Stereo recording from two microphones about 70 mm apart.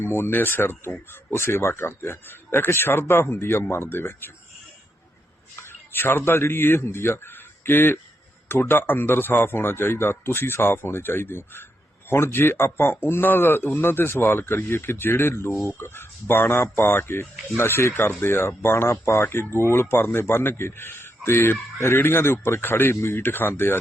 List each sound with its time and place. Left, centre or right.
0.0 s speech: left
5.5 s a man's voice: left